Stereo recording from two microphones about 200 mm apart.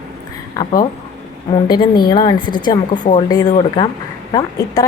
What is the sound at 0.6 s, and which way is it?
A woman's voice, 20° left (ahead or behind).